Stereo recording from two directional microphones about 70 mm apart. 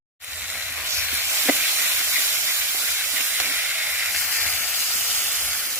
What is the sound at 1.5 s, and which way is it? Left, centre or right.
Steam, right.